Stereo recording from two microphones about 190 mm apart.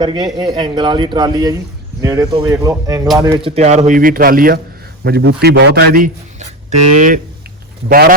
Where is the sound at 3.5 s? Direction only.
35° right (ahead or behind).